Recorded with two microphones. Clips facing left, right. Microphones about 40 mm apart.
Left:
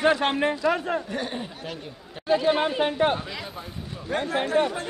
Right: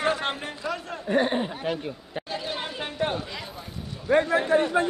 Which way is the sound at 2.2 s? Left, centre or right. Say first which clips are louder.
Left 12 dB; left.